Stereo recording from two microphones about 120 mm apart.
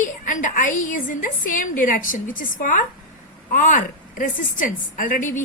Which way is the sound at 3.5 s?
90° left.